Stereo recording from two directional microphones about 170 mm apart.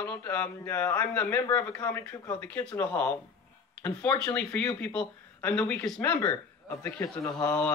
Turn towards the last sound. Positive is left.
turn(degrees=20)  # may be behind; listen again after turning